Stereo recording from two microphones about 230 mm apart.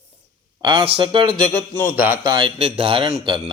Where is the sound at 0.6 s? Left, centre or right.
Right.